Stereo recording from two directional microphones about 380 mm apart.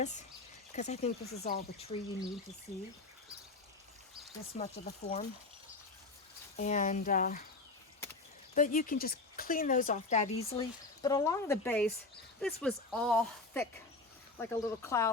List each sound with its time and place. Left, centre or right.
0.7 s speech: centre
4.5 s speech: centre
6.6 s speech: centre
8.5 s speech: left